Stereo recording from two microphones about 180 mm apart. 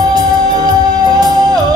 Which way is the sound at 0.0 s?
20° right (ahead or behind).